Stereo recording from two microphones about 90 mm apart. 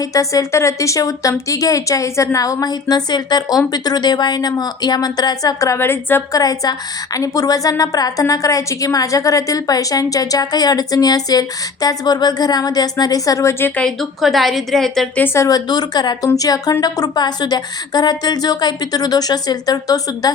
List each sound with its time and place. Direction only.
0.0 s a woman's voice: 40° left (ahead or behind)
6.3 s a woman's voice: 45° left (ahead or behind); by 13.8 s 25° left (ahead or behind)
13.8 s a woman's voice: centre (ahead or behind)
15.1 s speech: 20° left (ahead or behind)
15.4 s a woman's voice: 40° left (ahead or behind)